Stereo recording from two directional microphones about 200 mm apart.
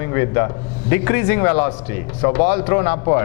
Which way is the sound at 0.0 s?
15° left (ahead or behind).